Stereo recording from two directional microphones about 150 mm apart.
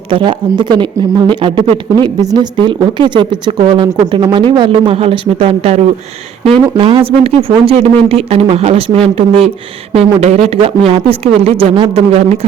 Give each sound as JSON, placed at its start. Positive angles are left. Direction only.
{"t": 0.1, "sound": "speech", "side_deg": -35}